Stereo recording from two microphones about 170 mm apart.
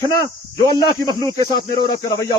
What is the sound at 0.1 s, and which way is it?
Speech, 20° left (ahead or behind).